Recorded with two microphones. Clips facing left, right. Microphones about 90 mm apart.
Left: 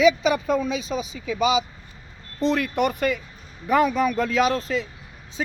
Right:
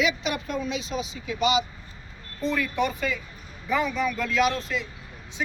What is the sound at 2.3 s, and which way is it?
Speech, 70° left (ahead or behind).